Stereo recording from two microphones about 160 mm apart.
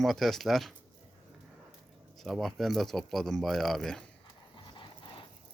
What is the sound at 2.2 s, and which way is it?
Speech, centre (ahead or behind).